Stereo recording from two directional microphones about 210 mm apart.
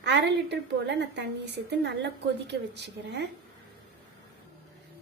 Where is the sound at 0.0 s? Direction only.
55° right (ahead or behind).